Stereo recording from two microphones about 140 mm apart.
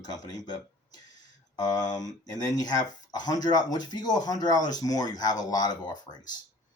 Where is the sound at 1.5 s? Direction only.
25° left (ahead or behind).